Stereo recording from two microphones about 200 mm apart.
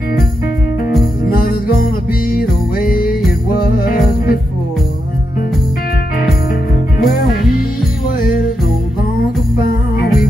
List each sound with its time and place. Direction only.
1.3 s music: 45° left (ahead or behind)
2.3 s jingle bell: 45° left (ahead or behind)
7.0 s music: 50° left (ahead or behind)